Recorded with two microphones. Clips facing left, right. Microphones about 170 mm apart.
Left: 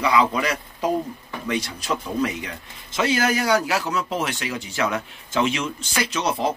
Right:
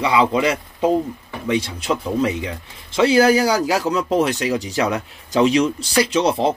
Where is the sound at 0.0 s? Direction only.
25° right (ahead or behind).